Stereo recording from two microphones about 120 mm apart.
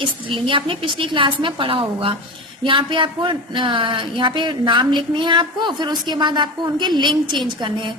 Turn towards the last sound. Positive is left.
turn(degrees=-40)  # may be behind; listen again after turning